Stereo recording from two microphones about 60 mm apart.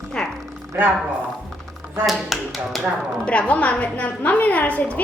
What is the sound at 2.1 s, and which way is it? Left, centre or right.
Speech, centre.